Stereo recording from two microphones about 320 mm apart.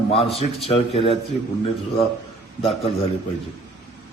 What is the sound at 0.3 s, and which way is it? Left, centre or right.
Speech, centre.